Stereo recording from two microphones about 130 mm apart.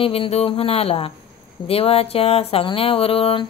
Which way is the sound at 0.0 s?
45° left (ahead or behind).